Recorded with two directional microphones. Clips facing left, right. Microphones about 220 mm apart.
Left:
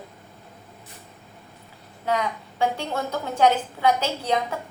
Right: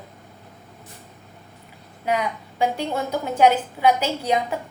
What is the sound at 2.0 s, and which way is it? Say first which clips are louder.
A woman's voice: right 1 dB; 15° right (ahead or behind).